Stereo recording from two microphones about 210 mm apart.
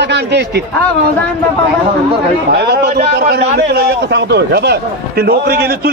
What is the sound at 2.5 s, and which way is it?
A man's voice, 50° right (ahead or behind).